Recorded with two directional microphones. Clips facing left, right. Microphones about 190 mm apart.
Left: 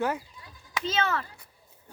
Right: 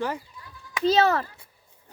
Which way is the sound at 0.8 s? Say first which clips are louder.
Right 9 dB; 35° right (ahead or behind).